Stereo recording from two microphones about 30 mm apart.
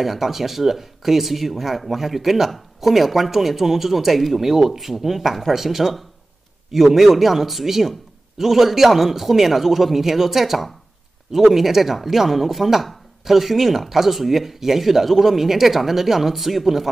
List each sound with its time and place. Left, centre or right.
0.0 s speech: centre